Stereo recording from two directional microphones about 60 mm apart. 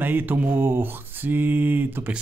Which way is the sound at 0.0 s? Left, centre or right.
Right.